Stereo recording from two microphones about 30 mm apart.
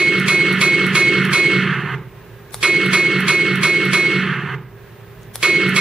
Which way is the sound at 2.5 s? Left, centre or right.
Centre.